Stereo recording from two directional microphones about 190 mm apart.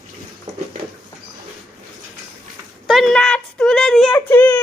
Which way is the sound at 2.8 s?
Centre (ahead or behind).